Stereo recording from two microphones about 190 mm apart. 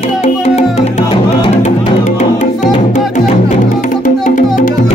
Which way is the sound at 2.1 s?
40° left (ahead or behind).